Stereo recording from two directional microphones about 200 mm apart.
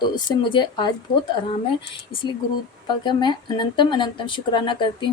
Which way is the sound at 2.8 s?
25° left (ahead or behind).